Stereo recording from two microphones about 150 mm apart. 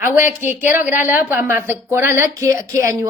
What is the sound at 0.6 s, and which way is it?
A woman's voice, 15° right (ahead or behind).